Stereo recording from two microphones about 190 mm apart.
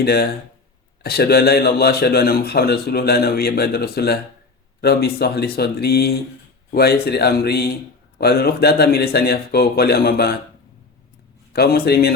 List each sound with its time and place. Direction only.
0.0 s a man's voice: 55° left (ahead or behind)
11.5 s a man's voice: 55° left (ahead or behind)